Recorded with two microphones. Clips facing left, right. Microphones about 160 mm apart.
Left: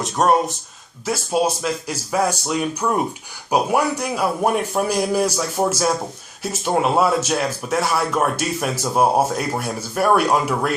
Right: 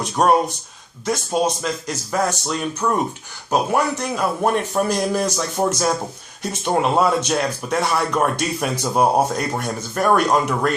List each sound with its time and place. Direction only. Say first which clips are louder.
0.0 s speech: right 1 dB; centre (ahead or behind)